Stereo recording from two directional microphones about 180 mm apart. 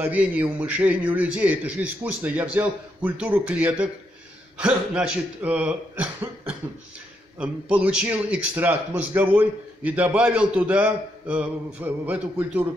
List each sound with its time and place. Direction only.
0.0 s a man's voice: 10° right (ahead or behind)
7.3 s a man's voice: 5° right (ahead or behind)